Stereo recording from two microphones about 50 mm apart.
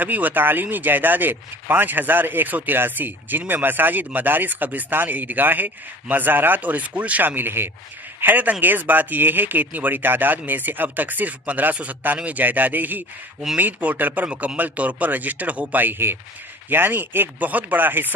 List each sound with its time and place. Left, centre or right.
0.0 s speech: right